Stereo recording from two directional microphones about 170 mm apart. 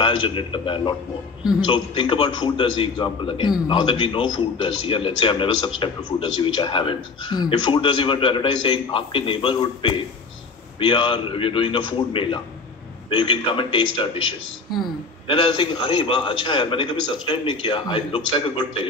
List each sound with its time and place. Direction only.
0.0 s a man's voice: 30° left (ahead or behind)